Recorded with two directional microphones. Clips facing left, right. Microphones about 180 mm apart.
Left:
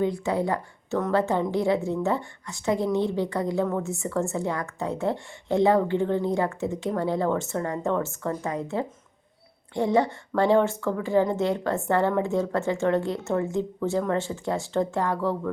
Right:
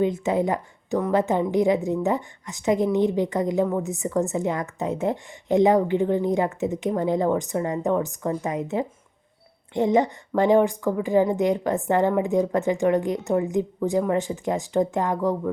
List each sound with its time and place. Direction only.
0.0 s a woman's voice: 20° right (ahead or behind)